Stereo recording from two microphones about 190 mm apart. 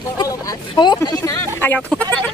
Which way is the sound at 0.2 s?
20° left (ahead or behind).